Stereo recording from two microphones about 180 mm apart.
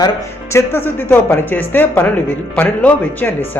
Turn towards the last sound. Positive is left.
turn(degrees=10)  # may be behind; listen again after turning